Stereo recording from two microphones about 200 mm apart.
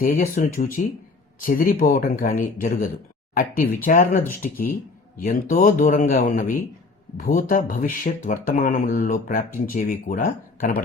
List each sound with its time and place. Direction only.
0.0 s speech: 45° left (ahead or behind)